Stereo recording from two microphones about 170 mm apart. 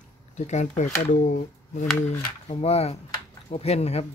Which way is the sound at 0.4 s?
45° left (ahead or behind).